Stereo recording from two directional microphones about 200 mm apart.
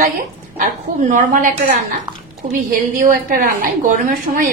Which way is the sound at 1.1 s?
40° right (ahead or behind).